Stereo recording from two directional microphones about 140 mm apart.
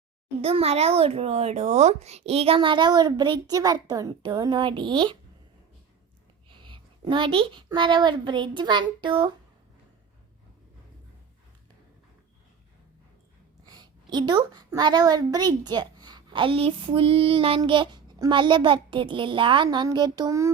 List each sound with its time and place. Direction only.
0.4 s a child's voice: 45° right (ahead or behind)
6.6 s a woman's voice: 35° right (ahead or behind)
13.7 s a woman's voice: 30° right (ahead or behind)